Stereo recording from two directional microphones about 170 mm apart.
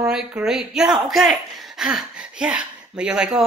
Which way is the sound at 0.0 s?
10° right (ahead or behind).